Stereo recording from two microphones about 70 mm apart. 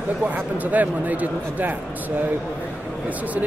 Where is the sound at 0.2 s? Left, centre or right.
Right.